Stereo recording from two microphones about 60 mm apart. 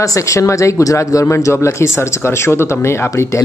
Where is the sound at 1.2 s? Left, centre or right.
Left.